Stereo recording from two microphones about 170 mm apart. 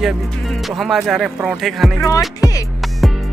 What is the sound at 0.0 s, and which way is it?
Speech, centre (ahead or behind).